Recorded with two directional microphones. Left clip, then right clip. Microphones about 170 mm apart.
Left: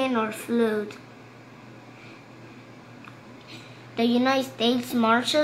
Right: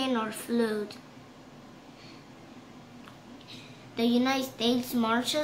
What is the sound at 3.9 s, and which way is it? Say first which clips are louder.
A woman's voice: left 5 dB; 35° left (ahead or behind).